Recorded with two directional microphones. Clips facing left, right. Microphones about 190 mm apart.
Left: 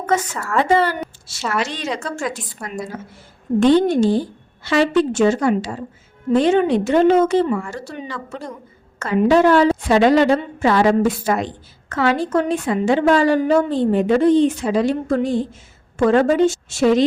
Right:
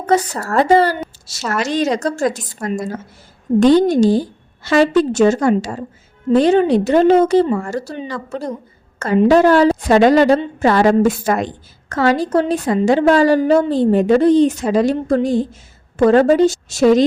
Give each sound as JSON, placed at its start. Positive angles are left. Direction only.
{"t": 0.0, "sound": "a woman's voice", "side_deg": -35}